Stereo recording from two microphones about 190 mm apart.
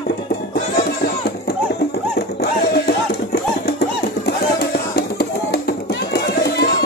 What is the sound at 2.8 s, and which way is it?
Music, 55° left (ahead or behind).